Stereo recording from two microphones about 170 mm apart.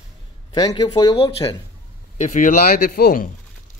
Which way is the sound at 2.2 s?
50° left (ahead or behind).